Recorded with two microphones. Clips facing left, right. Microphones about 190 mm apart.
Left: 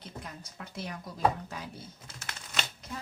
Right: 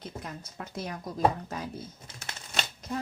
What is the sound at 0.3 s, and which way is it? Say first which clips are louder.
Speech: right 4 dB; 45° right (ahead or behind).